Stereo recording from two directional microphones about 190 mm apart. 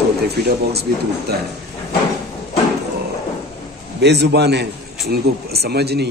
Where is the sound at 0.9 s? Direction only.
50° right (ahead or behind).